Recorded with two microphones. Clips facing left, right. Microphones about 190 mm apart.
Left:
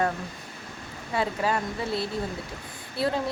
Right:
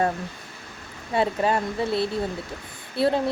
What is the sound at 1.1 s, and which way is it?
Speech, 25° right (ahead or behind).